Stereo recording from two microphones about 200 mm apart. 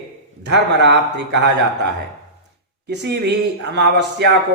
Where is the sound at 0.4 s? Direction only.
60° right (ahead or behind).